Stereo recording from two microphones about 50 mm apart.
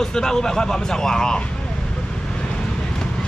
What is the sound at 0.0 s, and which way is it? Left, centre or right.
Speech, centre.